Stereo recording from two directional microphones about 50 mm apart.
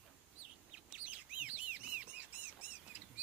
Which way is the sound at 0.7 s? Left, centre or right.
Right.